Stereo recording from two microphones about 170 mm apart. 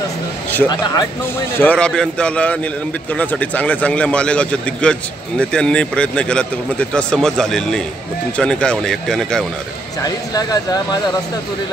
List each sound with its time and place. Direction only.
0.7 s speech: 25° left (ahead or behind)
1.5 s a man's voice: 10° left (ahead or behind)
10.0 s speech: 20° left (ahead or behind)